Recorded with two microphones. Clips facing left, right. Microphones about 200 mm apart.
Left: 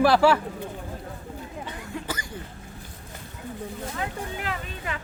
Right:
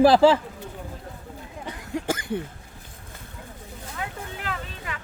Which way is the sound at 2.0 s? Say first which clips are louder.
Right 7 dB; 55° right (ahead or behind).